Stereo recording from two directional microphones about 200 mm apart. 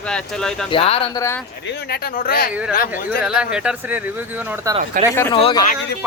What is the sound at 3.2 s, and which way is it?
Speech, 5° right (ahead or behind).